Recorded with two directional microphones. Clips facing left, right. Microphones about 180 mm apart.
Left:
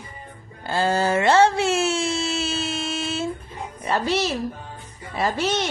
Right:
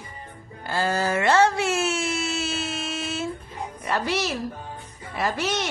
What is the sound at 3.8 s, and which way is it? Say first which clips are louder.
A woman's voice: left 3 dB; 30° left (ahead or behind).